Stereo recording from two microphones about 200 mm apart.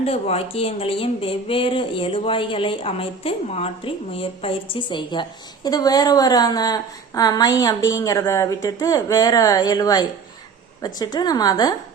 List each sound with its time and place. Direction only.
0.0 s speech: 30° left (ahead or behind)